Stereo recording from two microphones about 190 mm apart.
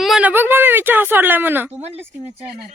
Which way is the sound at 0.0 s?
5° right (ahead or behind).